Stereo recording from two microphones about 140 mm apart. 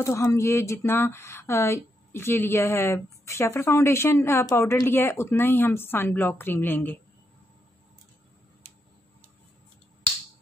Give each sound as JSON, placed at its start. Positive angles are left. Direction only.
{"t": 0.0, "sound": "speech", "side_deg": 20}